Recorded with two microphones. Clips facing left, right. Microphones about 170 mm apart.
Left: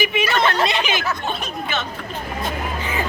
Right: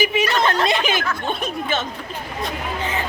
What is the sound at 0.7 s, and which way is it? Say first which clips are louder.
Speech: right 2 dB; 50° right (ahead or behind).